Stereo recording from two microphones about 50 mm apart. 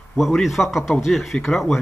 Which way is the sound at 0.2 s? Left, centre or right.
Centre.